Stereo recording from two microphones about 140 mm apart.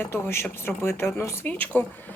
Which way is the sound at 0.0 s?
15° left (ahead or behind).